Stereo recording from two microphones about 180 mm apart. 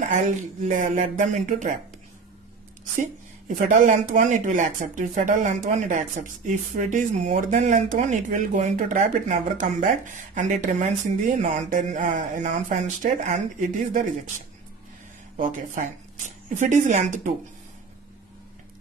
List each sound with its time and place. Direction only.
0.1 s speech: 45° right (ahead or behind)
3.0 s speech: 45° right (ahead or behind)
15.3 s speech: 45° right (ahead or behind)